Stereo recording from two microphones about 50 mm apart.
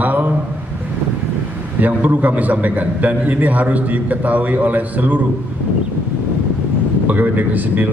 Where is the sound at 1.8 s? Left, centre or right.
Right.